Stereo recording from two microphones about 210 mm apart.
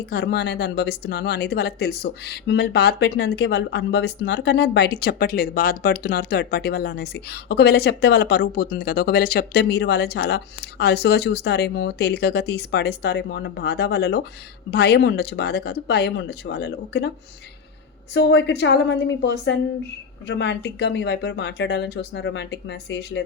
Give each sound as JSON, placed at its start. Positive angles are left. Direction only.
{"t": 0.0, "sound": "speech", "side_deg": 50}
{"t": 18.1, "sound": "speech", "side_deg": 55}